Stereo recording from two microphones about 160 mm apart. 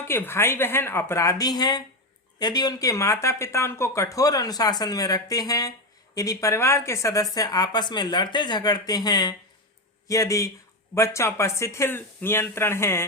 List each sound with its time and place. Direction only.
0.1 s speech: 15° left (ahead or behind)